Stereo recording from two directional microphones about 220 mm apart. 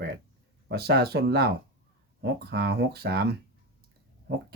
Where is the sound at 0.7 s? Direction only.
45° right (ahead or behind).